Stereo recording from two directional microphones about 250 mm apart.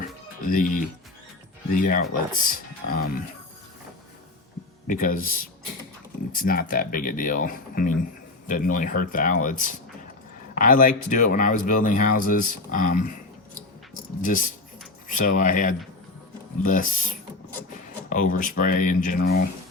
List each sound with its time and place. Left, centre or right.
0.4 s speech: left
4.9 s speech: left
14.2 s speech: left